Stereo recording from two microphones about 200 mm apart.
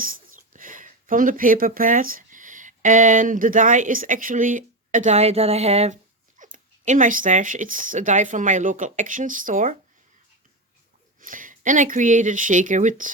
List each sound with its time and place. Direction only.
0.0 s speech: 45° right (ahead or behind)
11.2 s speech: 40° right (ahead or behind)